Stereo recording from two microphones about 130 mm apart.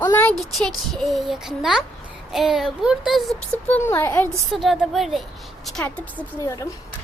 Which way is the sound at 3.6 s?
15° left (ahead or behind).